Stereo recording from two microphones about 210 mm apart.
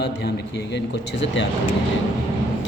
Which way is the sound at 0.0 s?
50° left (ahead or behind).